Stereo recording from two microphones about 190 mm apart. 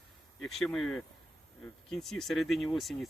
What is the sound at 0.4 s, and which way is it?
Speech, centre (ahead or behind).